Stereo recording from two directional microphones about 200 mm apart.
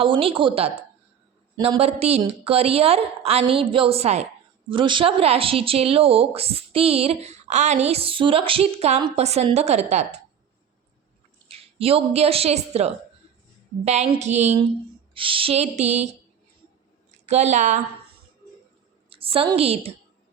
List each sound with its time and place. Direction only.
0.0 s a woman's voice: 25° right (ahead or behind)
11.4 s a woman's voice: 30° right (ahead or behind)
17.2 s a woman's voice: 35° right (ahead or behind)
19.1 s a woman's voice: 30° right (ahead or behind)